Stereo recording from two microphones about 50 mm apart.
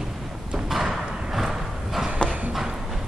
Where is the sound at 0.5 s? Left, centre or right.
Centre.